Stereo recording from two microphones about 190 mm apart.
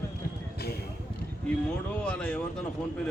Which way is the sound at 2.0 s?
5° left (ahead or behind).